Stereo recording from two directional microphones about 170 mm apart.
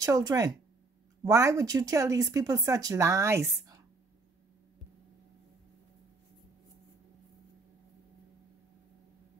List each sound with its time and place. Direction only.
0.0 s speech: 20° right (ahead or behind)